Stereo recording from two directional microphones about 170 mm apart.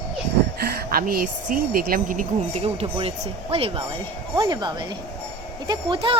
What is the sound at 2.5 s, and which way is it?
Speech, 35° right (ahead or behind).